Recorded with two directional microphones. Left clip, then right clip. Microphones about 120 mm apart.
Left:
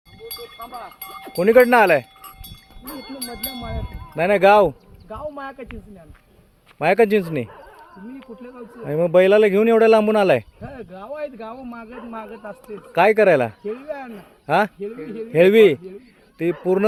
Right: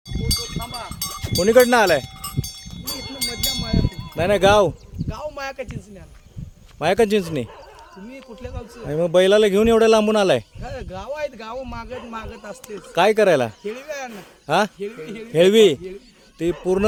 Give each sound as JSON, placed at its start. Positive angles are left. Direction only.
{"t": 1.4, "sound": "a man's voice", "side_deg": -10}
{"t": 2.8, "sound": "a sound", "side_deg": -5}
{"t": 4.1, "sound": "a man's voice", "side_deg": -10}
{"t": 5.0, "sound": "a sound", "side_deg": -55}
{"t": 6.7, "sound": "a man's voice", "side_deg": -10}
{"t": 8.8, "sound": "a man's voice", "side_deg": -15}
{"t": 10.6, "sound": "speech", "side_deg": -55}
{"t": 12.9, "sound": "a man's voice", "side_deg": -15}